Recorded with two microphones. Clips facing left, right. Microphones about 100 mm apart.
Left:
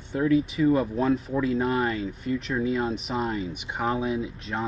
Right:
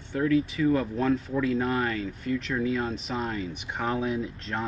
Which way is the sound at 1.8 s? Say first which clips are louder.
Left 2 dB; 30° left (ahead or behind).